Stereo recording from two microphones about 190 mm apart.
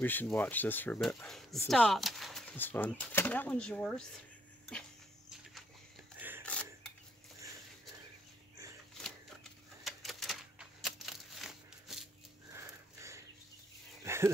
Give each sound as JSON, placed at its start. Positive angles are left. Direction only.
{"t": 0.0, "sound": "speech", "side_deg": 10}
{"t": 6.1, "sound": "a sound", "side_deg": -10}
{"t": 6.4, "sound": "mechanisms", "side_deg": 5}
{"t": 9.0, "sound": "typewriter", "side_deg": 0}
{"t": 12.4, "sound": "wheeze", "side_deg": -15}
{"t": 14.0, "sound": "a sound", "side_deg": -15}